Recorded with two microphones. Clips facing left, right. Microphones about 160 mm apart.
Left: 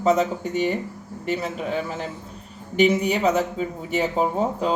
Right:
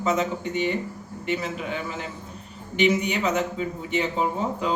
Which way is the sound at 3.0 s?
35° left (ahead or behind).